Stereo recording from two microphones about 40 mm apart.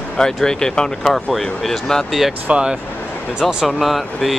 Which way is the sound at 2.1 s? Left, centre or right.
Centre.